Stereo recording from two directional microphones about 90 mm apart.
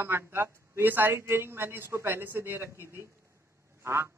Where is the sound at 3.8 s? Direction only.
30° right (ahead or behind).